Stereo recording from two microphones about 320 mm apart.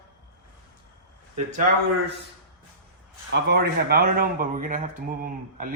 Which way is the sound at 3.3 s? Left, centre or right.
Right.